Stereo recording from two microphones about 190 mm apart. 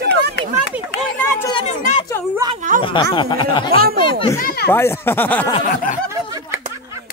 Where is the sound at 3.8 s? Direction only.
55° right (ahead or behind).